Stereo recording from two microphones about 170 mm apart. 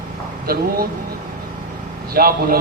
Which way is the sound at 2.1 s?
60° right (ahead or behind).